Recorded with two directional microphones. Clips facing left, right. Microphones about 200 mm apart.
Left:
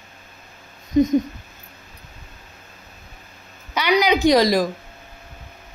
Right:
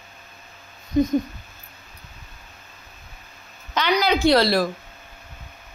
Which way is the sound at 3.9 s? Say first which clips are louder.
Left 2 dB; 15° left (ahead or behind).